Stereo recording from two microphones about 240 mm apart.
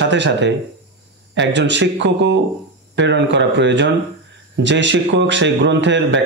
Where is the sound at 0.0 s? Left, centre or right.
Right.